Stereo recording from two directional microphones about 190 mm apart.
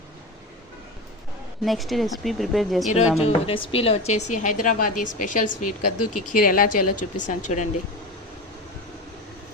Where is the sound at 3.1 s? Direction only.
30° left (ahead or behind).